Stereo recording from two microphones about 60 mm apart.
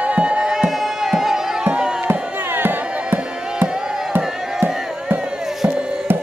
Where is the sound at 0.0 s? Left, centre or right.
Right.